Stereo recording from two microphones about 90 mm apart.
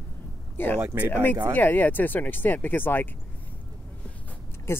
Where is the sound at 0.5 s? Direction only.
20° left (ahead or behind).